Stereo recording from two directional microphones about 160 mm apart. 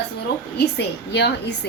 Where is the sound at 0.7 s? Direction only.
90° left.